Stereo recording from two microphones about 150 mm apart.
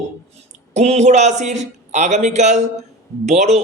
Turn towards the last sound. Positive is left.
turn(degrees=-50)  # may be behind; listen again after turning